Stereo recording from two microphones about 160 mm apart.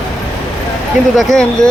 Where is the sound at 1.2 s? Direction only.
5° left (ahead or behind).